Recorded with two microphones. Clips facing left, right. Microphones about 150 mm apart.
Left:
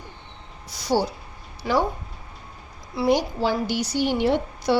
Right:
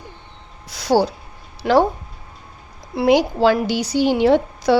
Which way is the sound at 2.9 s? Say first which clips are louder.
Right 6 dB; 75° right (ahead or behind).